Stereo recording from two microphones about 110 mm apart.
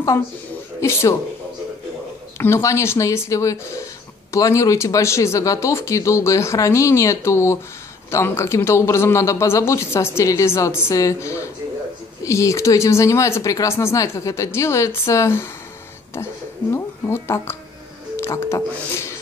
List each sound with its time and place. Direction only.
0.7 s speech: 25° left (ahead or behind)
2.3 s speech: 25° left (ahead or behind)
16.7 s speech: 25° left (ahead or behind)